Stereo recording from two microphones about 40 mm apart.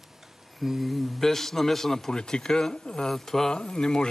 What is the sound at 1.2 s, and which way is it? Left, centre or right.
Speech, centre.